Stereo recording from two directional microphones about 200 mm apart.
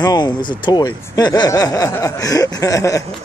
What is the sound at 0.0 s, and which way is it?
Speech, 20° left (ahead or behind).